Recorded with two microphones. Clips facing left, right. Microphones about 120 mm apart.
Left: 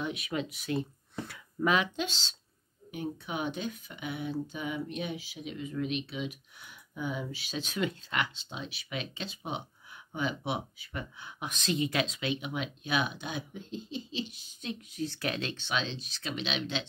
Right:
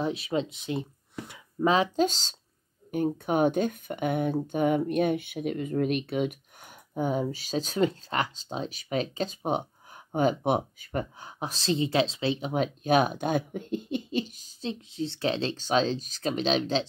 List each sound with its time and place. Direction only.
0.0 s speech: 30° right (ahead or behind); by 14.2 s 55° right (ahead or behind)
14.2 s speech: 40° right (ahead or behind)